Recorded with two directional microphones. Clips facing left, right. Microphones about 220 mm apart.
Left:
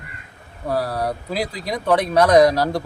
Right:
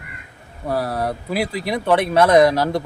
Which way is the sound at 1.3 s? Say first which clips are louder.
Right 3 dB; 60° right (ahead or behind).